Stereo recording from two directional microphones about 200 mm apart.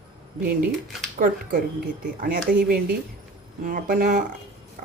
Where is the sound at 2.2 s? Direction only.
45° right (ahead or behind).